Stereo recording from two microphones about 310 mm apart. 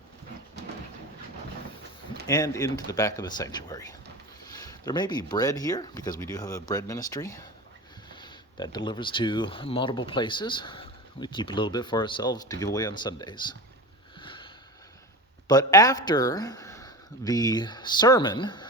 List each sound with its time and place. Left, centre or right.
2.2 s speech: centre
14.2 s sniff: centre
15.4 s speech: centre